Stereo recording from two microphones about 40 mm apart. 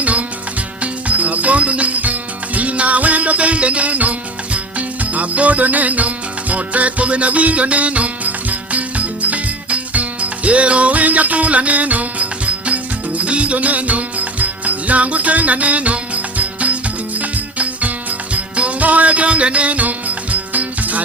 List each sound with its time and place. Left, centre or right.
0.0 s music: right
5.1 s music: right